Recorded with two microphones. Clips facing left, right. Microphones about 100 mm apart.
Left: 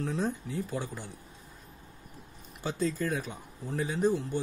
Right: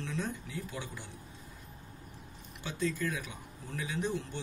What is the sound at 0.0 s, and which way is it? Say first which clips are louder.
Speech: left 6 dB; 40° left (ahead or behind).